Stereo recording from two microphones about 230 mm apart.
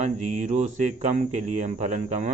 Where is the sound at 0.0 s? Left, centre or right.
Right.